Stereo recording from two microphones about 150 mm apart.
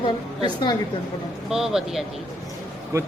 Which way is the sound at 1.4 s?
5° right (ahead or behind).